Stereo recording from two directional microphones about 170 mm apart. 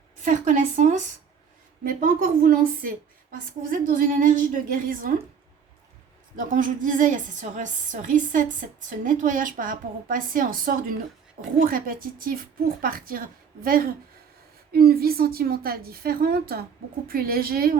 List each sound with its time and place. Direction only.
0.3 s a woman's voice: 45° right (ahead or behind)
6.5 s a woman's voice: 50° right (ahead or behind)